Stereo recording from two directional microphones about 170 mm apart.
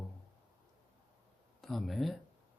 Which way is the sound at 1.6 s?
Centre (ahead or behind).